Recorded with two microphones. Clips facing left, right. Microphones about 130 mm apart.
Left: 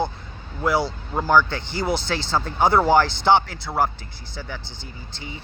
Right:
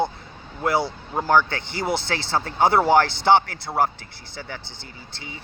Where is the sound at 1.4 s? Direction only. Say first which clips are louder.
Left 1 dB; 60° right (ahead or behind).